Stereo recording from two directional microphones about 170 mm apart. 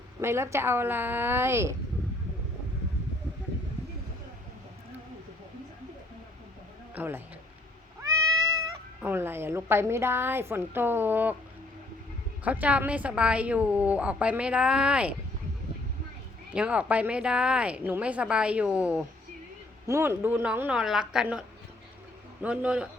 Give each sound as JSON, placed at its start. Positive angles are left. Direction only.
{"t": 0.2, "sound": "a woman's voice", "side_deg": -15}
{"t": 6.9, "sound": "speech", "side_deg": -10}
{"t": 8.0, "sound": "cat", "side_deg": -20}
{"t": 9.0, "sound": "a woman's voice", "side_deg": -10}
{"t": 12.5, "sound": "a woman's voice", "side_deg": -10}
{"t": 16.5, "sound": "a woman's voice", "side_deg": -5}